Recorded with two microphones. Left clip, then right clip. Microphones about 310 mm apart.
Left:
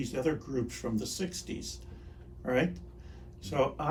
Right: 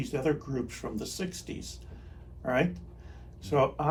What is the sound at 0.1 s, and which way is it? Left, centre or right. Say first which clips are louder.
Speech: right 3 dB; right.